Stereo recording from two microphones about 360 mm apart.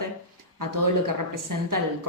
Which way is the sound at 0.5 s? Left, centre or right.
Right.